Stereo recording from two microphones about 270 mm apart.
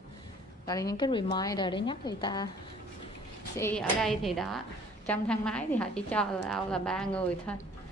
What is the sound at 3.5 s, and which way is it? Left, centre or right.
A woman's voice, centre.